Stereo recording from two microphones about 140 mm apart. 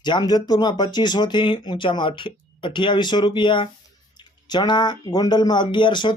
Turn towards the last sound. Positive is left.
turn(degrees=35)  # may be behind; listen again after turning